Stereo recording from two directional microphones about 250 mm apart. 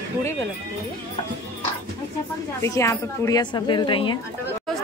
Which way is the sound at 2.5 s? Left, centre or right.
Centre.